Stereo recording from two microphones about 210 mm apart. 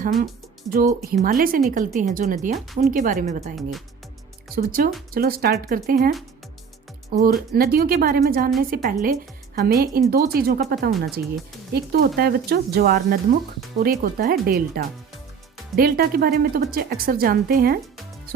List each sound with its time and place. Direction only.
0.7 s a woman's voice: 40° right (ahead or behind)
3.5 s speech: centre (ahead or behind)
4.5 s a woman's voice: 45° right (ahead or behind)